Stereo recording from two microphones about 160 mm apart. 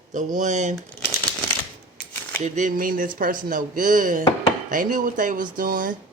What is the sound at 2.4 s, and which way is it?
Speech, 50° right (ahead or behind).